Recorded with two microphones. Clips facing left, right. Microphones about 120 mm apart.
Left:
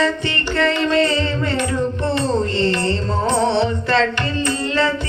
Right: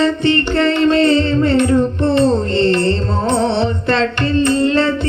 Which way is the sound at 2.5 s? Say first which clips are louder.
Right 5 dB; 50° right (ahead or behind).